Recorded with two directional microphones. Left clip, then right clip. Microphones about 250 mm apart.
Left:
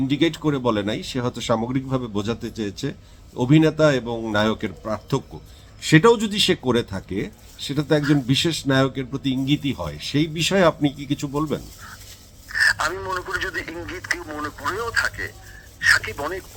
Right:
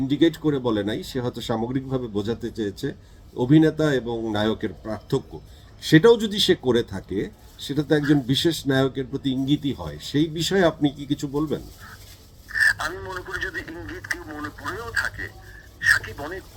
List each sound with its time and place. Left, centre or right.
0.1 s a man's voice: centre